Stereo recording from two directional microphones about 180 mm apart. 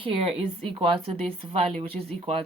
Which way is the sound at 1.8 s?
30° right (ahead or behind).